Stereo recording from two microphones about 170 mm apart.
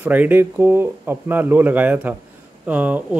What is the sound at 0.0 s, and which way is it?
Speech, 10° right (ahead or behind).